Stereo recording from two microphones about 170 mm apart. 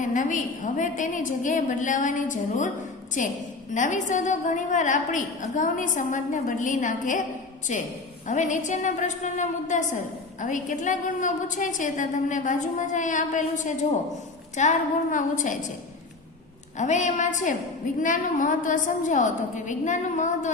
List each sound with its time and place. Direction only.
0.0 s a woman's voice: 50° left (ahead or behind)
8.3 s a woman's voice: 45° left (ahead or behind)
16.7 s a woman's voice: 45° left (ahead or behind)